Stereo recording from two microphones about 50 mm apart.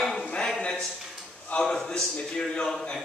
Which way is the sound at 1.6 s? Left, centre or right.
Centre.